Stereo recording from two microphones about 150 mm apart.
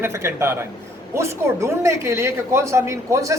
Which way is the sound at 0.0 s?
15° right (ahead or behind).